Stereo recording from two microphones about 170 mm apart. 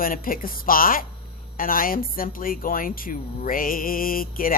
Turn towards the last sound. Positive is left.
turn(degrees=55)  # may be behind; listen again after turning